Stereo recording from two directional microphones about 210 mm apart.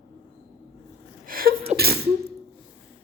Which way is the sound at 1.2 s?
45° right (ahead or behind).